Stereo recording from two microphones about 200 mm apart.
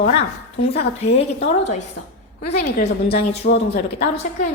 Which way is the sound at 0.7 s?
30° left (ahead or behind).